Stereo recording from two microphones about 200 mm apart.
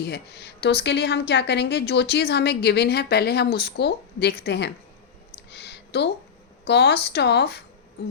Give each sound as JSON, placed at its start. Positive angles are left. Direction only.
{"t": 0.0, "sound": "speech", "side_deg": 55}
{"t": 5.5, "sound": "a sound", "side_deg": 55}
{"t": 6.7, "sound": "speech", "side_deg": 55}